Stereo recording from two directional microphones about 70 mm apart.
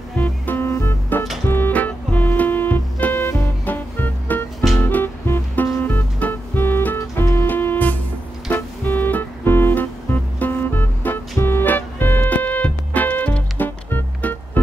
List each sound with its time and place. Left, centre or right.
0.2 s music: left